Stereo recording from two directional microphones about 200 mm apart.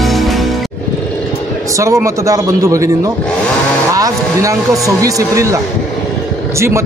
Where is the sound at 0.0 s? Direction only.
Centre (ahead or behind).